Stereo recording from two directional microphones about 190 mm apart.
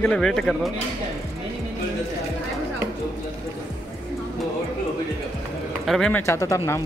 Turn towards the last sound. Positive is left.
turn(degrees=15)  # may be behind; listen again after turning